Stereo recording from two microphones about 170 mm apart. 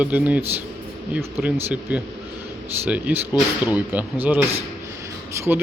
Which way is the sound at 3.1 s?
10° right (ahead or behind).